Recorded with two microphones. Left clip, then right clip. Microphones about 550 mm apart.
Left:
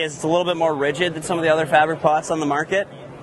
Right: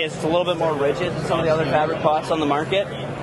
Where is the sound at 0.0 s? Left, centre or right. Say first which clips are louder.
Left 1 dB; left.